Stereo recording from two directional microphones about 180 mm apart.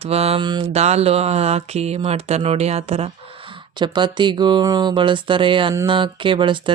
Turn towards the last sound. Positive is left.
turn(degrees=-25)  # may be behind; listen again after turning